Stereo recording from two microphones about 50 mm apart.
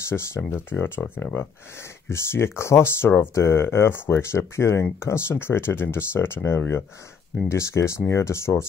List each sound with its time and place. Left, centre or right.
0.1 s speech: left
0.5 s speech: left
2.0 s speech: left
7.4 s speech: left